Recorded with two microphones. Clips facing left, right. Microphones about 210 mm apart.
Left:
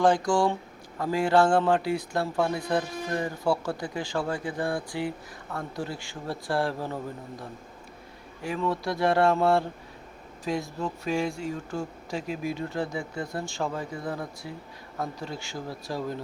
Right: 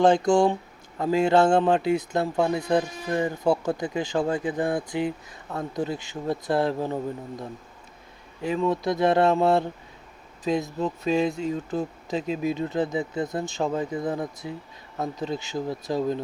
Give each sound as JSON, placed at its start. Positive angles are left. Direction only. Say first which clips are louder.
{"t": 0.0, "sound": "a man's voice", "louder": "right 4 dB", "side_deg": -25}